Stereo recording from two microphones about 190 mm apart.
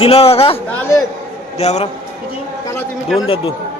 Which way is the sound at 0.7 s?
15° left (ahead or behind).